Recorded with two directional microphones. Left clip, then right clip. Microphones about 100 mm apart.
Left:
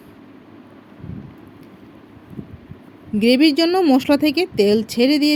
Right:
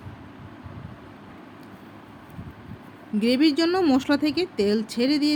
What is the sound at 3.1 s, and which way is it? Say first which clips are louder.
Speech: left 6 dB; 50° left (ahead or behind).